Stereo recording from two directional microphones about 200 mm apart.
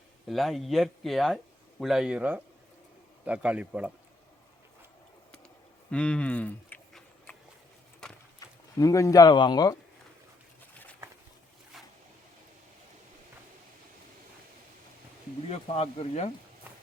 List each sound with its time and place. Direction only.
0.3 s a man's voice: centre (ahead or behind)
5.9 s a sound: 5° left (ahead or behind)
8.4 s speech: 15° left (ahead or behind)
15.4 s speech: 30° left (ahead or behind)